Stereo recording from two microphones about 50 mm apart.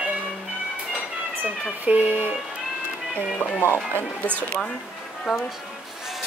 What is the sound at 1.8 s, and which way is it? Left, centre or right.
Speech, right.